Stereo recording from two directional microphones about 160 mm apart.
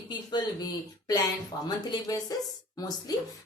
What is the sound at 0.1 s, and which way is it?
A woman's voice, 25° left (ahead or behind).